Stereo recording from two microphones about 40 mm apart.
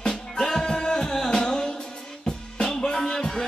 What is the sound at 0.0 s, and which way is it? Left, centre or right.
Music, centre.